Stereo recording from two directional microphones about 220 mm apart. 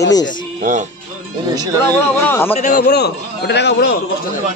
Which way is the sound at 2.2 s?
10° left (ahead or behind).